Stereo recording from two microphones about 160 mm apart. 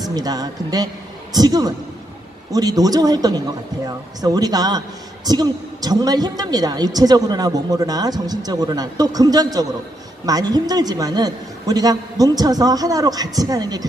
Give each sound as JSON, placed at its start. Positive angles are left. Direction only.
{"t": 0.0, "sound": "speech", "side_deg": -25}